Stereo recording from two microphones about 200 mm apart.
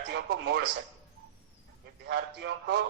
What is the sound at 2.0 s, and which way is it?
Speech, 55° right (ahead or behind).